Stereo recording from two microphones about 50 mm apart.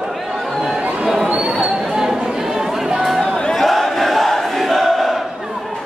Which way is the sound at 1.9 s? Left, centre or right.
Centre.